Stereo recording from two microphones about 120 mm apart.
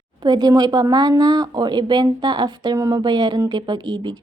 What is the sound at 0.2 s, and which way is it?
Speech, 35° right (ahead or behind).